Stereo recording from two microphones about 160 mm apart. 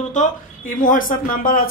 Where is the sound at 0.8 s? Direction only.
60° left (ahead or behind).